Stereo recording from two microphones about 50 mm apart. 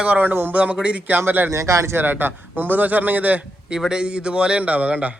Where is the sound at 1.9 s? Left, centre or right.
Right.